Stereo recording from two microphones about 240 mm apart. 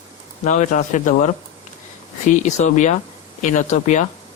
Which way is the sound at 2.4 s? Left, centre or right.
Left.